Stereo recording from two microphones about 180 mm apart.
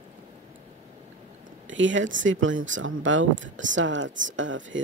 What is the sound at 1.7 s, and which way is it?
Speech, 90° right.